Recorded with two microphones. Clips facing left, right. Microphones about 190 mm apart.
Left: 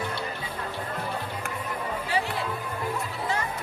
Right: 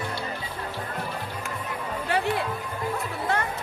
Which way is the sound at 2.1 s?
55° right (ahead or behind).